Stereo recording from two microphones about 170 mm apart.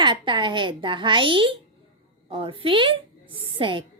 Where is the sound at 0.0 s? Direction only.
30° right (ahead or behind).